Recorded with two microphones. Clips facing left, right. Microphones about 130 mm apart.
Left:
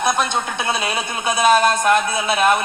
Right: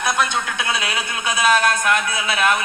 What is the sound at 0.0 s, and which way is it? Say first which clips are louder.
A man's voice: left 2 dB; 25° left (ahead or behind).